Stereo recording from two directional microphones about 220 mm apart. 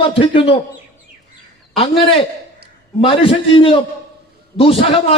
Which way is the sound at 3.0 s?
25° left (ahead or behind).